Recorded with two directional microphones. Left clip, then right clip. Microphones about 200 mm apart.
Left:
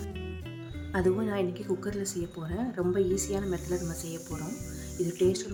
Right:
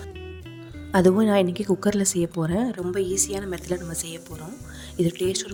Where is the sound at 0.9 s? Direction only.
40° right (ahead or behind).